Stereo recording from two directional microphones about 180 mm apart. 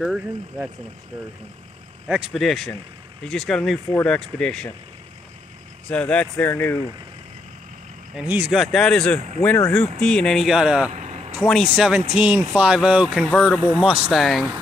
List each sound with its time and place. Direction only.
0.0 s speech: 5° right (ahead or behind)
2.0 s speech: 5° right (ahead or behind)
5.9 s speech: 5° left (ahead or behind)
8.1 s speech: 5° right (ahead or behind)
10.9 s vehicle: 35° right (ahead or behind)
11.7 s speech: 5° right (ahead or behind)
13.7 s speech: 5° right (ahead or behind)